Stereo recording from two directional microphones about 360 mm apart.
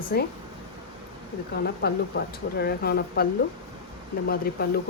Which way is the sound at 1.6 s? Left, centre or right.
Left.